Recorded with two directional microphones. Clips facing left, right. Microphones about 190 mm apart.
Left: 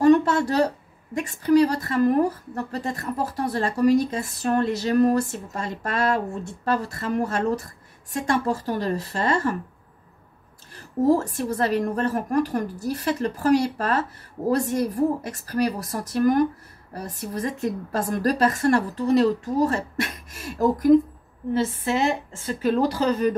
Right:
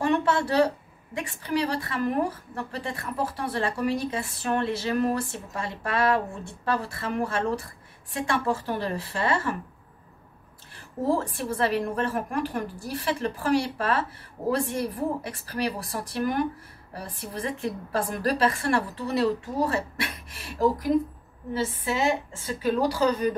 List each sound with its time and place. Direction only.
0.0 s a sound: 40° left (ahead or behind)
1.1 s a woman's voice: 40° left (ahead or behind)
10.7 s a woman's voice: 40° left (ahead or behind)